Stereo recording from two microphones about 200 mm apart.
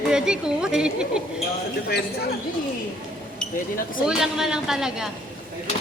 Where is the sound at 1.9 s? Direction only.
55° left (ahead or behind).